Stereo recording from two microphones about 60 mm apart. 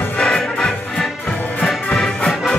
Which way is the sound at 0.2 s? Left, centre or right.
Centre.